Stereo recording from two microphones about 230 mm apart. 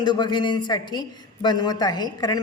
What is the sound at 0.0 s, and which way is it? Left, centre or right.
A man's voice, centre.